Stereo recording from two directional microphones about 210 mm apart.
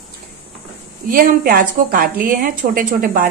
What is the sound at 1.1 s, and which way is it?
A woman's voice, 45° right (ahead or behind).